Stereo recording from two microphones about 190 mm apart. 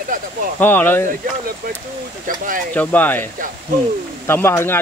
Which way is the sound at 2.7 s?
10° left (ahead or behind).